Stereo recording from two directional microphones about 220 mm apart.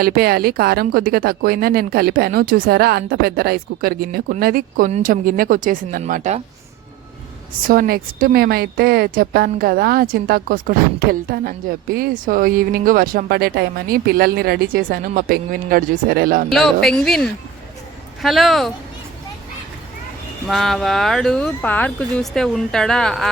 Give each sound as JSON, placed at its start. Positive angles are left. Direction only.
{"t": 0.0, "sound": "a woman's voice", "side_deg": -45}
{"t": 7.7, "sound": "a woman's voice", "side_deg": -40}
{"t": 16.5, "sound": "speech", "side_deg": 0}
{"t": 20.5, "sound": "speech", "side_deg": 0}